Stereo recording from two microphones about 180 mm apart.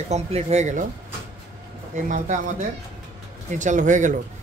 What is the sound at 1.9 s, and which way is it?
Speech, 40° right (ahead or behind).